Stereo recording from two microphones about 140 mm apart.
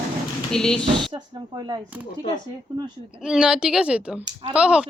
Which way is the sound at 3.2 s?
5° right (ahead or behind).